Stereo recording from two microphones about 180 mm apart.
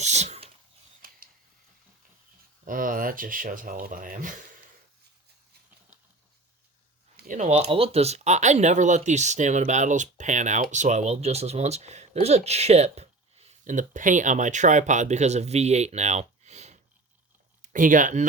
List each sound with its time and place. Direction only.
0.0 s a sound: 40° right (ahead or behind)
2.6 s speech: 50° right (ahead or behind)
7.2 s speech: 45° right (ahead or behind)